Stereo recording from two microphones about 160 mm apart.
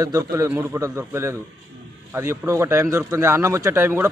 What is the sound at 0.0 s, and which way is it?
Speech, 20° right (ahead or behind).